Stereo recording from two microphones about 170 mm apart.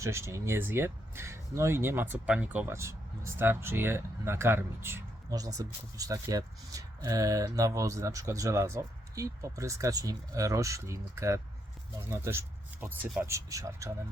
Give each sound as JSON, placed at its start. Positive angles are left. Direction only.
{"t": 0.0, "sound": "speech", "side_deg": -15}